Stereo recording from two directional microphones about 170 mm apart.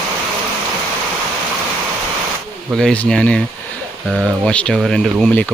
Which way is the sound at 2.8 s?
5° left (ahead or behind).